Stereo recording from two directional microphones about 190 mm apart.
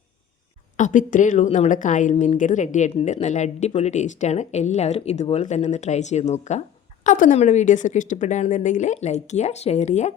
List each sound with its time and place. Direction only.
0.8 s a woman's voice: 40° left (ahead or behind)